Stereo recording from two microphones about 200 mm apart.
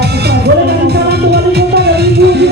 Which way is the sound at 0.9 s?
55° right (ahead or behind).